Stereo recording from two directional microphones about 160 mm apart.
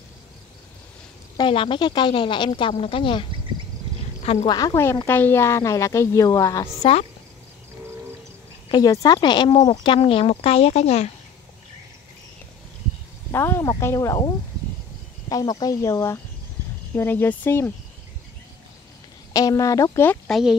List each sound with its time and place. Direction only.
1.3 s speech: 30° left (ahead or behind)
4.2 s a sound: 45° left (ahead or behind)
4.5 s speech: 25° left (ahead or behind)
6.8 s speech: 40° left (ahead or behind)
8.6 s speech: 25° left (ahead or behind); by 11.1 s 40° left (ahead or behind)
13.3 s speech: 15° left (ahead or behind)
19.3 s speech: 20° left (ahead or behind)
20.2 s speech: centre (ahead or behind)